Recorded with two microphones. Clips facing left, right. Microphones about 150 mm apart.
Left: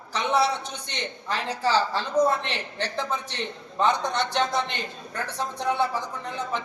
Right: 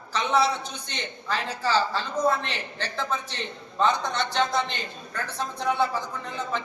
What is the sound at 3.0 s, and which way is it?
Speech, 15° left (ahead or behind).